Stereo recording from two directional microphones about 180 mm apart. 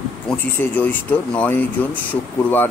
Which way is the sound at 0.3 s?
10° left (ahead or behind).